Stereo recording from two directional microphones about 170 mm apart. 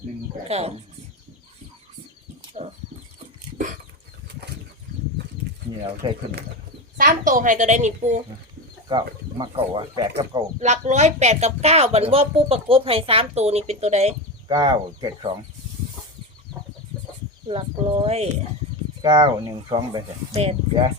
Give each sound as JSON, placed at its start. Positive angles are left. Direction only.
{"t": 0.4, "sound": "speech", "side_deg": -35}
{"t": 2.6, "sound": "speech", "side_deg": -40}
{"t": 6.0, "sound": "speech", "side_deg": -25}
{"t": 6.9, "sound": "a woman's voice", "side_deg": -55}
{"t": 8.9, "sound": "speech", "side_deg": -25}
{"t": 10.6, "sound": "speech", "side_deg": -45}
{"t": 14.4, "sound": "speech", "side_deg": -25}
{"t": 17.5, "sound": "speech", "side_deg": -35}
{"t": 19.0, "sound": "speech", "side_deg": -25}